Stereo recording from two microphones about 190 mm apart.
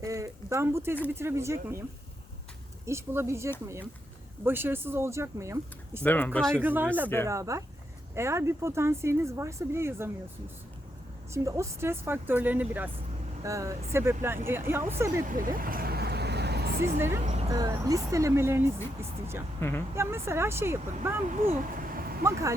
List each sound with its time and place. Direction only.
0.0 s a sound: 15° right (ahead or behind)
1.0 s speech: 15° right (ahead or behind)
2.8 s speech: 15° right (ahead or behind)
6.0 s speech: 10° left (ahead or behind)
6.6 s speech: 10° right (ahead or behind)
11.3 s speech: 15° right (ahead or behind)
15.3 s vehicle: 45° right (ahead or behind)
16.8 s speech: 15° right (ahead or behind)
20.0 s speech: 15° right (ahead or behind)
21.4 s vehicle: 45° right (ahead or behind)
22.2 s speech: 15° right (ahead or behind)